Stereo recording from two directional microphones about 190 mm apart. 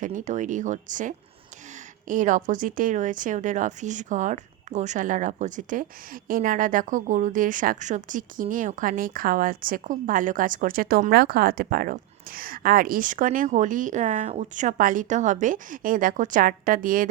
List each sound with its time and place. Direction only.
0.0 s a woman's voice: 45° right (ahead or behind)